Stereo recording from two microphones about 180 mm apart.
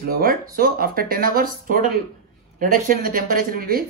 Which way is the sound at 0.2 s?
50° right (ahead or behind).